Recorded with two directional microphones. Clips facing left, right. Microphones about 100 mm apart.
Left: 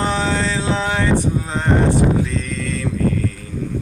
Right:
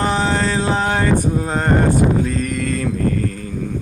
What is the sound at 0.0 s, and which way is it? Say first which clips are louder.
Mantra: right 2 dB; 45° right (ahead or behind).